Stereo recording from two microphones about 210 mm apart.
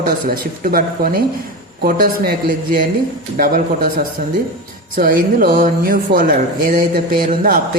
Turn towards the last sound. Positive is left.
turn(degrees=-40)  # may be behind; listen again after turning